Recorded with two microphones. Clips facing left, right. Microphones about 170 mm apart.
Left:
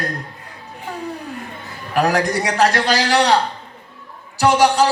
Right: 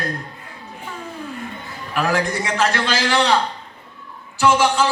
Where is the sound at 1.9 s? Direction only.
40° left (ahead or behind).